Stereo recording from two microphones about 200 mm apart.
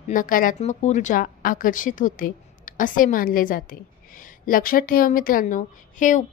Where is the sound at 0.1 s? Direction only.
40° left (ahead or behind).